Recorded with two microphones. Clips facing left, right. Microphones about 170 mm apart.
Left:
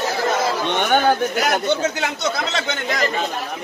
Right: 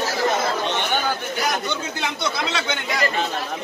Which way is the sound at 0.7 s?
55° left (ahead or behind).